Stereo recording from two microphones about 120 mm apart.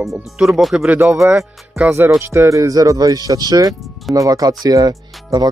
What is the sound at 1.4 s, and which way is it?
Music, 10° right (ahead or behind).